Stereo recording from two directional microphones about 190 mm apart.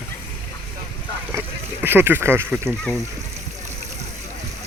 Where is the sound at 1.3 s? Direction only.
10° right (ahead or behind).